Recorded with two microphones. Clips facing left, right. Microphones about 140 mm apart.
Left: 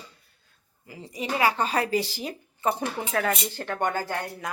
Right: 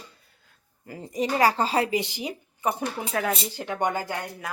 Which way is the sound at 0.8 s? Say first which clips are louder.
Right 5 dB; 50° right (ahead or behind).